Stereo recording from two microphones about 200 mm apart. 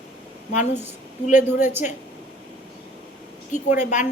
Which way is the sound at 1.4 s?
10° right (ahead or behind).